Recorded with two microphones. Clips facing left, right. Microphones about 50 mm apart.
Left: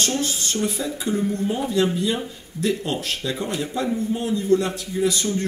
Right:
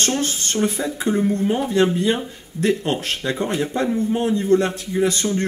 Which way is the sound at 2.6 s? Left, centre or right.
Right.